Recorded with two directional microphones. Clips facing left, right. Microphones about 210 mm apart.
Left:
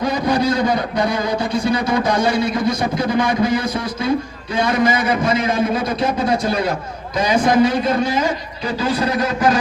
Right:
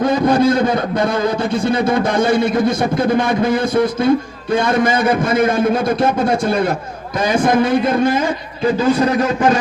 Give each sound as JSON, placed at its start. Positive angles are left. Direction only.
{"t": 1.5, "sound": "a man's voice", "side_deg": -50}